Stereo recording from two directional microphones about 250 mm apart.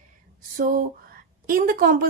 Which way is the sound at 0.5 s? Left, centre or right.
Right.